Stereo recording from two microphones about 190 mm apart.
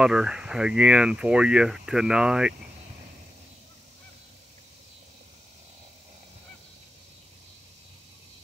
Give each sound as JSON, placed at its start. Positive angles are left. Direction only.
{"t": 0.0, "sound": "speech", "side_deg": -5}